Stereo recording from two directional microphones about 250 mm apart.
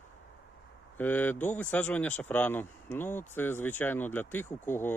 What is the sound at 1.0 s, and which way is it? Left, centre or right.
Speech, centre.